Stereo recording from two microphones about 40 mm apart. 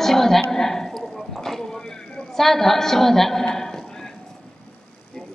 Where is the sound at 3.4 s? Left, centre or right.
Centre.